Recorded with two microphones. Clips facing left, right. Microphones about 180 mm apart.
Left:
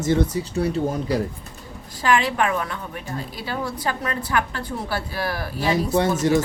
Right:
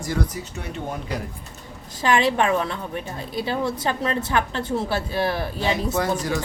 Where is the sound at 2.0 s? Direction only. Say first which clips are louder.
Right 1 dB; 25° right (ahead or behind).